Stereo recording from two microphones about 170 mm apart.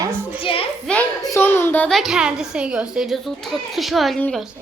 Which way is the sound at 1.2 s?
15° left (ahead or behind).